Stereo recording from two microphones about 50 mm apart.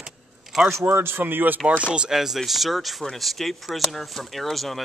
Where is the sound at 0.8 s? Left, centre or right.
Right.